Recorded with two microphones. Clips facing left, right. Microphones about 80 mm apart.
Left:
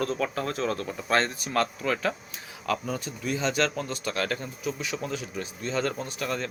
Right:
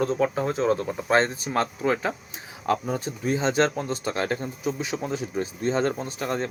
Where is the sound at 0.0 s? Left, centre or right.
Centre.